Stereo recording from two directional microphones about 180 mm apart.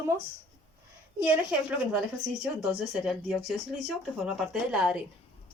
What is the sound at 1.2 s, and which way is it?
Speech, 5° right (ahead or behind).